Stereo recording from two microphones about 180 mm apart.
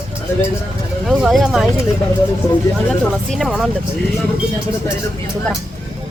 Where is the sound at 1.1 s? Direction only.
Centre (ahead or behind).